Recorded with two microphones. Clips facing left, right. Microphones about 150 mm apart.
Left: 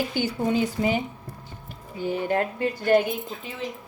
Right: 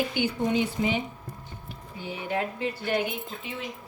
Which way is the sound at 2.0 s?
50° left (ahead or behind).